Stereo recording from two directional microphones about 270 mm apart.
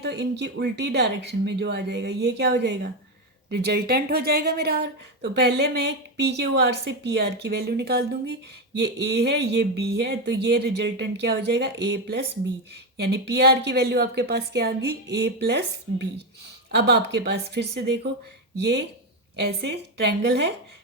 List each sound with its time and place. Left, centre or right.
0.0 s speech: right